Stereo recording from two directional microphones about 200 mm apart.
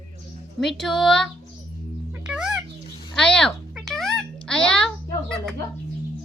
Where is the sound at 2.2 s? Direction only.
5° right (ahead or behind).